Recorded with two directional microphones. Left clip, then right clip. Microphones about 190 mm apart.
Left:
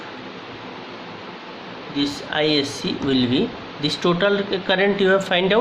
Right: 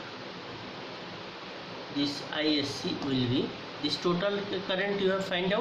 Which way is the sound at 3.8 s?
55° left (ahead or behind).